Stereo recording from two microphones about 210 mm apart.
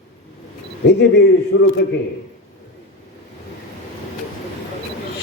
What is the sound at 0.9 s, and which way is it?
Speech, 55° left (ahead or behind).